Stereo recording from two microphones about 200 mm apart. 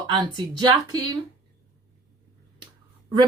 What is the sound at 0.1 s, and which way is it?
Speech, 25° right (ahead or behind).